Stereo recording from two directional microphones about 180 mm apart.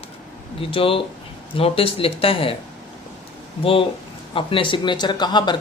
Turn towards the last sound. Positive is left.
turn(degrees=25)  # may be behind; listen again after turning